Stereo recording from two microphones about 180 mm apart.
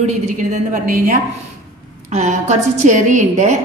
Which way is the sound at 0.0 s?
40° right (ahead or behind).